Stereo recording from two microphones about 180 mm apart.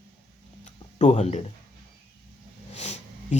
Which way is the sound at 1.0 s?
40° left (ahead or behind).